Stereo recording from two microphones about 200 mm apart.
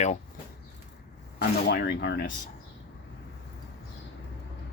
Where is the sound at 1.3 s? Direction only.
55° left (ahead or behind).